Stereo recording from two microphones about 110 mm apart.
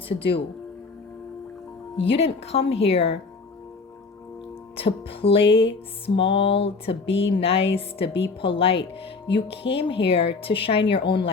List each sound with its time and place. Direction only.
2.0 s music: 60° left (ahead or behind)
4.8 s music: 60° left (ahead or behind)